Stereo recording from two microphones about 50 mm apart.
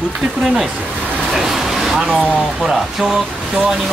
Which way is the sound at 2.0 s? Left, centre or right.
Centre.